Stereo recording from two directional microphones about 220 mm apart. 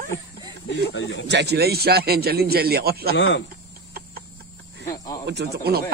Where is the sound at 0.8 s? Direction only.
50° left (ahead or behind).